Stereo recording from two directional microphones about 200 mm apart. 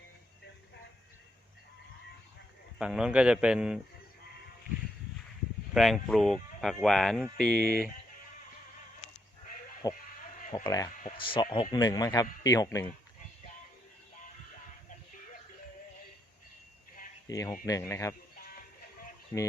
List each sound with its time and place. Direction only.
2.7 s speech: 5° right (ahead or behind)
5.7 s speech: centre (ahead or behind)
9.8 s speech: 20° left (ahead or behind)
17.2 s speech: 15° left (ahead or behind)